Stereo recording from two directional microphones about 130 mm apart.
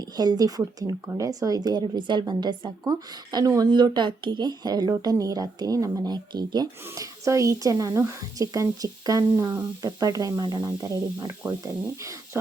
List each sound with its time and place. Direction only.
0.0 s a woman's voice: 30° right (ahead or behind)